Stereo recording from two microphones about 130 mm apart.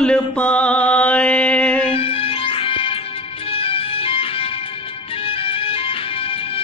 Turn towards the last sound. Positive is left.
turn(degrees=45)  # may be behind; listen again after turning